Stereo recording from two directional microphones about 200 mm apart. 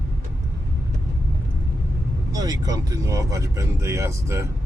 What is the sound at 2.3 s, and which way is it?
Speech, 15° right (ahead or behind).